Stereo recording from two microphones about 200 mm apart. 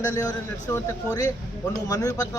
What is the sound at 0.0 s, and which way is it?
A man's voice, 20° left (ahead or behind).